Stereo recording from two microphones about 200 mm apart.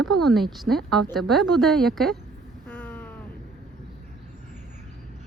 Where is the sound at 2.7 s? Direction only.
10° left (ahead or behind).